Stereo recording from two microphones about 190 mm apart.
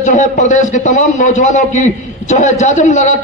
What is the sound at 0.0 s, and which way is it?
A man's voice, 40° left (ahead or behind).